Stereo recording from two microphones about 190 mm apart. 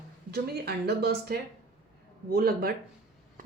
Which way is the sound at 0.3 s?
60° right (ahead or behind).